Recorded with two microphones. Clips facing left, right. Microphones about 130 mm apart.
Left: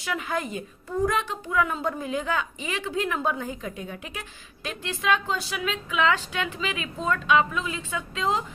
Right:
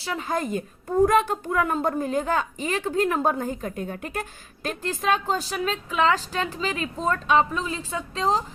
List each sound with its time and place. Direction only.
0.0 s a woman's voice: 35° right (ahead or behind)